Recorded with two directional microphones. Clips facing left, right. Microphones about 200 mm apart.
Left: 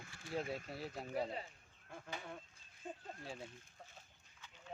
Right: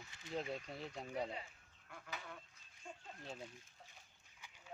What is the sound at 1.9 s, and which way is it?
Speech, 30° left (ahead or behind).